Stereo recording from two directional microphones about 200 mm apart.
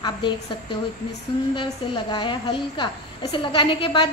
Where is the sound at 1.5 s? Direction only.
25° left (ahead or behind).